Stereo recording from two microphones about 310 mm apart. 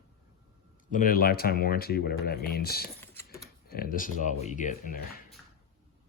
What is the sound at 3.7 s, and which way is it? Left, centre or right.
Speech, left.